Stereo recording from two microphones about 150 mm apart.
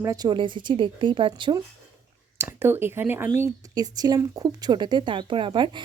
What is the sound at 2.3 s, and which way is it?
Speech, 15° right (ahead or behind).